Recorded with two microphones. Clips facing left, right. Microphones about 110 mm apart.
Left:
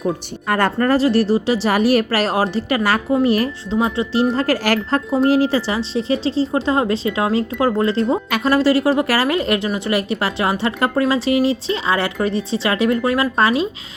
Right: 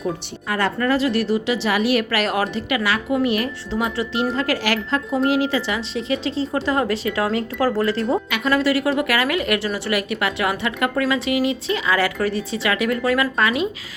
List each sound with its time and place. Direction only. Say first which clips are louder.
0.4 s a woman's voice: left 4 dB; 50° left (ahead or behind); by 13.7 s 30° left (ahead or behind)